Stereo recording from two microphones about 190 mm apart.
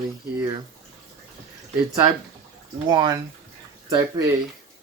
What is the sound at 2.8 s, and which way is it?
Speech, 25° right (ahead or behind).